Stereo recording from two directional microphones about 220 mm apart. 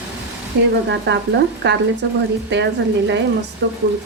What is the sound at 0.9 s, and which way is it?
Speech, 50° right (ahead or behind).